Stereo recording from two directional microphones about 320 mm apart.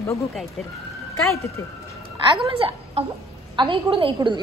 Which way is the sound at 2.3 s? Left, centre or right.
Centre.